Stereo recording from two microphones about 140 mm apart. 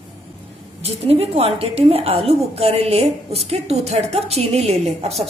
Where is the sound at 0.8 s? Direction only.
45° right (ahead or behind).